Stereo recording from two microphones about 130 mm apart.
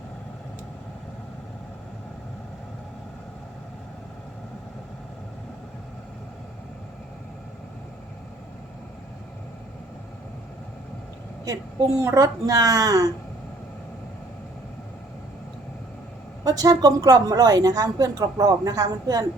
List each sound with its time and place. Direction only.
11.4 s a woman's voice: 25° right (ahead or behind)
16.4 s a woman's voice: 30° right (ahead or behind)